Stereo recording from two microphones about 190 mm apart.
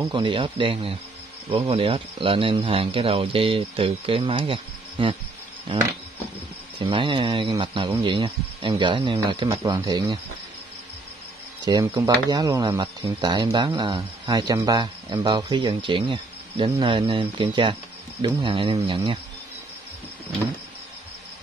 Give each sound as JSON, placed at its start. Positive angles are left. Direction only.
{"t": 0.1, "sound": "speech", "side_deg": -25}
{"t": 11.6, "sound": "speech", "side_deg": -20}